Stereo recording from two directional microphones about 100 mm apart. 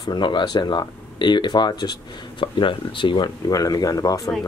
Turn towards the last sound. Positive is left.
turn(degrees=35)  # may be behind; listen again after turning